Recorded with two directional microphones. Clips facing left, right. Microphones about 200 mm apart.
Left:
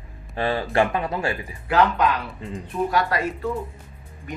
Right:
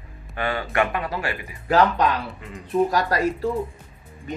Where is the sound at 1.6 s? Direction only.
35° right (ahead or behind).